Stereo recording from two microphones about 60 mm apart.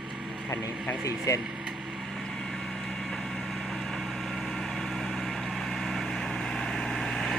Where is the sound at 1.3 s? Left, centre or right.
Left.